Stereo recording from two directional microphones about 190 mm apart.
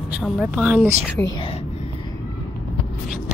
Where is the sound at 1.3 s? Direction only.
30° left (ahead or behind).